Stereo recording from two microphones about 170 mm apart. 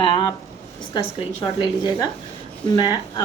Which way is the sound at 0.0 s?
30° left (ahead or behind).